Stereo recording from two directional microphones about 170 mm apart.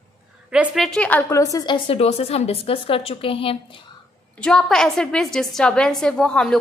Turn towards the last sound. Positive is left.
turn(degrees=5)  # may be behind; listen again after turning